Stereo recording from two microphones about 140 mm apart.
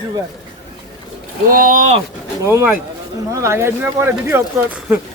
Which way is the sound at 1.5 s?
85° right.